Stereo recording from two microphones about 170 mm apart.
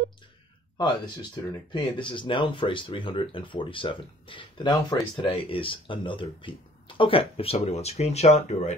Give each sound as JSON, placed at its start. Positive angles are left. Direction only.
{"t": 0.7, "sound": "speech", "side_deg": 25}